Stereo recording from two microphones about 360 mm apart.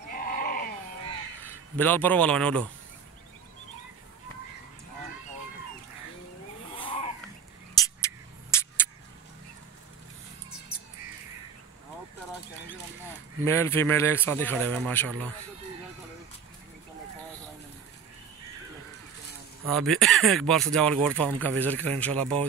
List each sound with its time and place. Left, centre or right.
0.1 s sheep: left
1.4 s speech: centre
7.7 s music: centre
13.4 s speech: centre
19.7 s speech: centre